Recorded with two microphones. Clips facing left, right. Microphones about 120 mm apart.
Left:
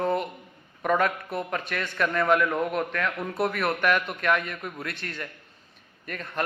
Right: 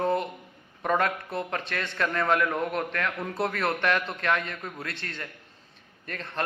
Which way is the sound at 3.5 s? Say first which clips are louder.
Left 1 dB; 30° right (ahead or behind).